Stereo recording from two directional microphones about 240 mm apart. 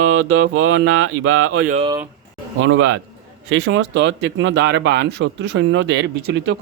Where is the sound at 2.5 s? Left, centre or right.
Right.